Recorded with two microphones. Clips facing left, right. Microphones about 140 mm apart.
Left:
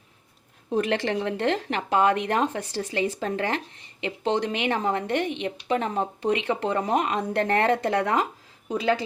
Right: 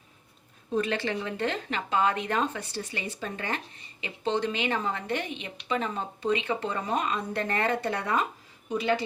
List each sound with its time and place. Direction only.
0.7 s speech: 80° left